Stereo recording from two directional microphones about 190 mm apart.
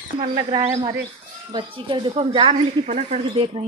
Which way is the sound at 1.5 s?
25° right (ahead or behind).